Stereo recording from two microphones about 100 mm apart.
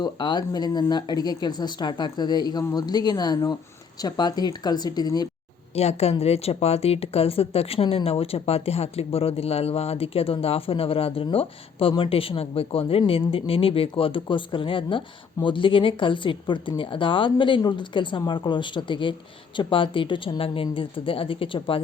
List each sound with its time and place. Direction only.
0.0 s speech: 45° left (ahead or behind)
5.7 s speech: 90° left; by 21.8 s 60° left (ahead or behind)